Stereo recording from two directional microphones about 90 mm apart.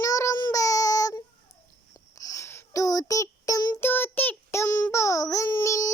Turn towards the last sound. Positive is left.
turn(degrees=35)  # may be behind; listen again after turning